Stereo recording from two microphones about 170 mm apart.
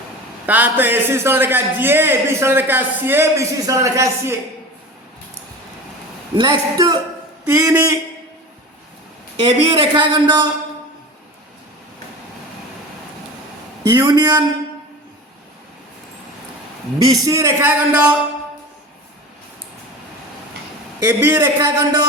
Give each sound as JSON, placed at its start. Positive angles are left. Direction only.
{"t": 0.4, "sound": "a man's voice", "side_deg": -10}
{"t": 6.3, "sound": "a man's voice", "side_deg": -30}
{"t": 9.4, "sound": "speech", "side_deg": -30}
{"t": 13.8, "sound": "speech", "side_deg": -25}
{"t": 17.0, "sound": "a man's voice", "side_deg": -20}
{"t": 21.0, "sound": "a man's voice", "side_deg": -15}